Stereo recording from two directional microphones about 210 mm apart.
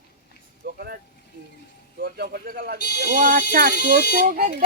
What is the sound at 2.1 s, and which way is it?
Speech, 50° right (ahead or behind).